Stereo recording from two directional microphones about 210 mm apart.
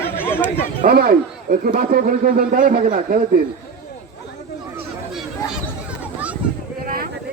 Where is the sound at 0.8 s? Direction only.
45° right (ahead or behind).